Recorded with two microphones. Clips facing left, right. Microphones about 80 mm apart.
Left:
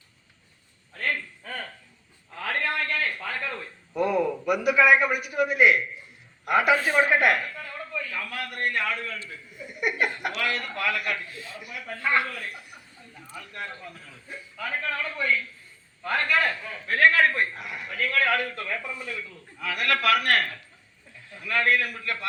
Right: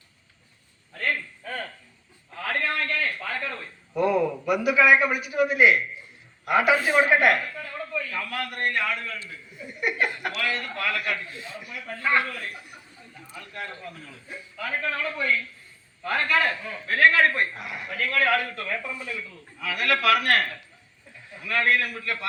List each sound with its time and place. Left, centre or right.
2.4 s a sound: centre
3.9 s a man's voice: centre
9.6 s a man's voice: centre
11.3 s a man's voice: right
11.6 s a man's voice: centre